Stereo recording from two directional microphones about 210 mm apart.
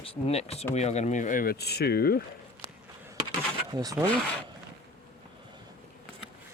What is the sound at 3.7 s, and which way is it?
Speech, 15° right (ahead or behind).